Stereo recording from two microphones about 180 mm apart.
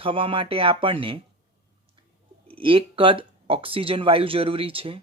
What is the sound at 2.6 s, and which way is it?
Speech, 30° right (ahead or behind).